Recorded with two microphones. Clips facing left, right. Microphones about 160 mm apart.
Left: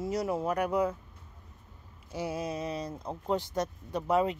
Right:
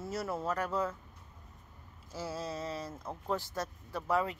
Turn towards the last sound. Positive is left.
turn(degrees=20)  # may be behind; listen again after turning